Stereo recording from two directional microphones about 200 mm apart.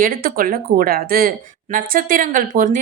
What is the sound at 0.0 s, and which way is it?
Speech, 45° right (ahead or behind).